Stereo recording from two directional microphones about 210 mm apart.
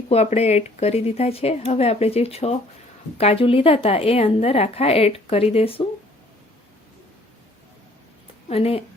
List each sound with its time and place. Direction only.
0.1 s a woman's voice: 30° left (ahead or behind)
8.4 s a woman's voice: 30° left (ahead or behind)